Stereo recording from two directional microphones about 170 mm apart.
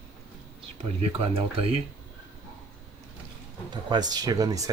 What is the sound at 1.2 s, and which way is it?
Speech, 35° right (ahead or behind).